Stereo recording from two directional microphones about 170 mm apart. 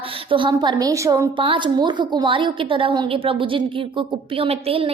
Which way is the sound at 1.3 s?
30° right (ahead or behind).